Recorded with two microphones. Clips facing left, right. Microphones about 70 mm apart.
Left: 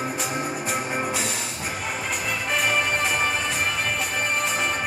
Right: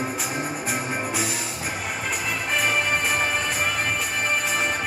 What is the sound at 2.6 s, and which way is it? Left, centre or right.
Music, centre.